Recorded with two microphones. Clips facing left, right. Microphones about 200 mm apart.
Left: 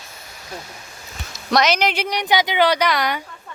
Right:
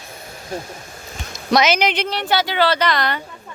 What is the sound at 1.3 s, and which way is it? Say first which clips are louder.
Speech: right 2 dB; centre (ahead or behind).